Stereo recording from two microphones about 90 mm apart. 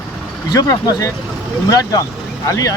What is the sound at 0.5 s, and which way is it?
Speech, 40° left (ahead or behind).